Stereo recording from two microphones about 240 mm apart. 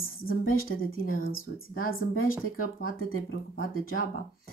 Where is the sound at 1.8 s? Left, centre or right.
Left.